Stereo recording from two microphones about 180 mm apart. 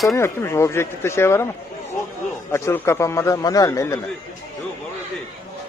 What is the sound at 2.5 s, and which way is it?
A man's voice, 15° left (ahead or behind).